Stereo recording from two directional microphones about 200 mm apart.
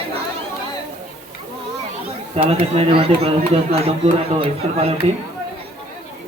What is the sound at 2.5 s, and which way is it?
Speech, 30° right (ahead or behind).